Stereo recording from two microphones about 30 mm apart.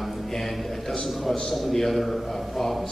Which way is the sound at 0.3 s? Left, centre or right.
Centre.